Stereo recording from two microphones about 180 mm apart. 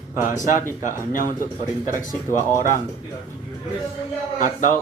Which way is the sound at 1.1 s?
50° left (ahead or behind).